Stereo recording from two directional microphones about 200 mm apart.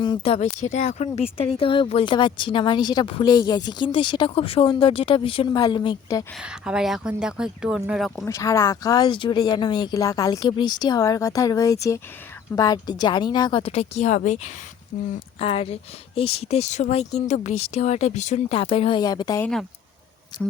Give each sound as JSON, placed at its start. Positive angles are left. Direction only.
{"t": 0.0, "sound": "speech", "side_deg": 20}
{"t": 0.3, "sound": "a woman's voice", "side_deg": 35}
{"t": 6.4, "sound": "speech", "side_deg": -5}
{"t": 8.2, "sound": "a woman's voice", "side_deg": 15}